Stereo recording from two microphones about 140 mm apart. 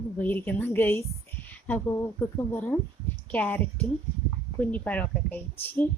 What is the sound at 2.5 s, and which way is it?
Speech, 10° left (ahead or behind).